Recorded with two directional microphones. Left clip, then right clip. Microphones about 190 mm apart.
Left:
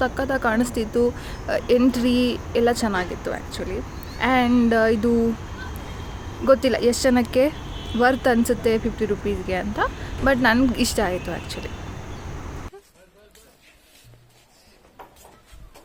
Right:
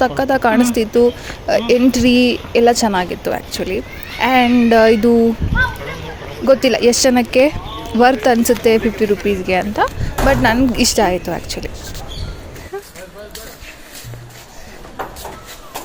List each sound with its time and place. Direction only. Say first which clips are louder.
0.0 s a woman's voice: right 8 dB; 35° right (ahead or behind)
6.4 s a woman's voice: right 6 dB; 35° right (ahead or behind)